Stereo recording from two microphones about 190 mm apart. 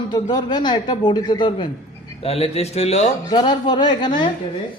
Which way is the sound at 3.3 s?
25° left (ahead or behind).